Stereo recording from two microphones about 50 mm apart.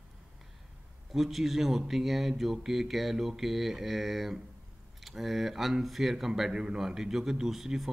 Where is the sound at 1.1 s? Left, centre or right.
Centre.